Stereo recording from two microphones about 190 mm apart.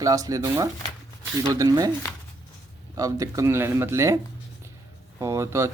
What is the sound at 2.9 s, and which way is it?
Speech, 20° right (ahead or behind).